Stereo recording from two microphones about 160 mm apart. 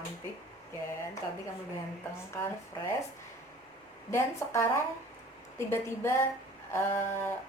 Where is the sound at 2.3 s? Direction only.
15° left (ahead or behind).